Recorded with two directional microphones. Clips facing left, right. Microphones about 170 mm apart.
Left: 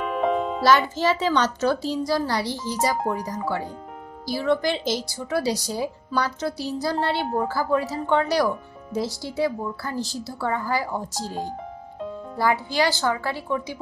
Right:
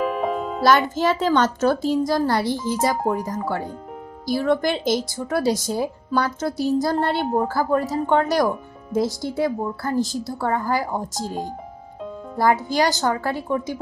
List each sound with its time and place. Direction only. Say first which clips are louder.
0.0 s music: even; 5° right (ahead or behind)
0.6 s speech: right 4 dB; 50° right (ahead or behind)
12.4 s speech: right 3 dB; 45° right (ahead or behind)